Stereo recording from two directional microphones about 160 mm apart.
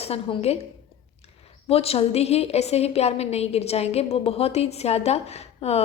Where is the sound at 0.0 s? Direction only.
40° left (ahead or behind).